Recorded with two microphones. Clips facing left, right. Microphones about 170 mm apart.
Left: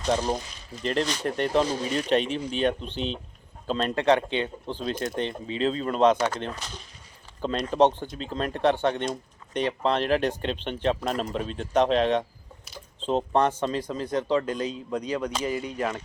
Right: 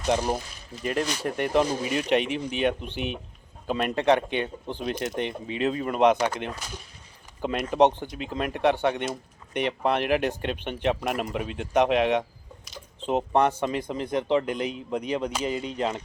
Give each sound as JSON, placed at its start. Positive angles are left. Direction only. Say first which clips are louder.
{"t": 0.0, "sound": "speech", "louder": "even", "side_deg": -10}